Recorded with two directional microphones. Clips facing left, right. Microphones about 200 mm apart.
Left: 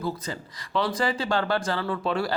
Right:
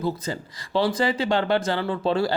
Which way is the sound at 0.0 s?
30° right (ahead or behind).